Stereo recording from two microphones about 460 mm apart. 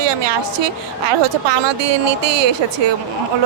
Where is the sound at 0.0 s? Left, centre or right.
Right.